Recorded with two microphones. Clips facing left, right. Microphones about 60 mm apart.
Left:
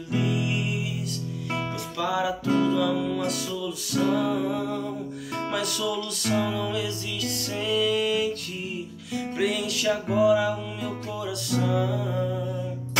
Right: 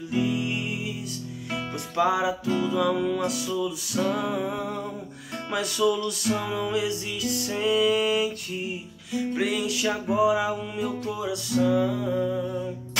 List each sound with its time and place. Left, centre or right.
0.1 s music: centre
2.0 s music: centre
6.5 s music: centre